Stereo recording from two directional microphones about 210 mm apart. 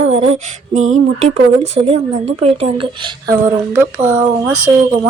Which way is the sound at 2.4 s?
25° right (ahead or behind).